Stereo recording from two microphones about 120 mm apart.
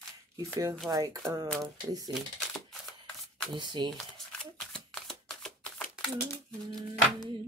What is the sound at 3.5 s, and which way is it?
Speech, 40° right (ahead or behind).